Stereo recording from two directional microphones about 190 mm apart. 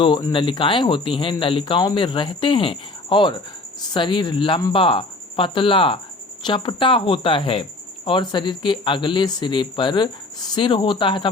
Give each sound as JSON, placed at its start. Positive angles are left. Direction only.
{"t": 0.0, "sound": "speech", "side_deg": 25}